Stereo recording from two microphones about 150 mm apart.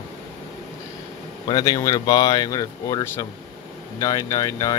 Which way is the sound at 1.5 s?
25° left (ahead or behind).